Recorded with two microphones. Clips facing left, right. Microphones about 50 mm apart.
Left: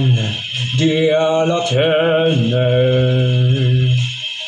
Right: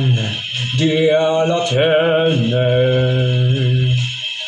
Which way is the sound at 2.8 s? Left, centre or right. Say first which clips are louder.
Left 1 dB; right.